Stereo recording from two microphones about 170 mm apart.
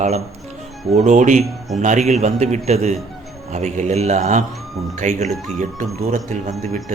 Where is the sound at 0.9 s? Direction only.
45° right (ahead or behind).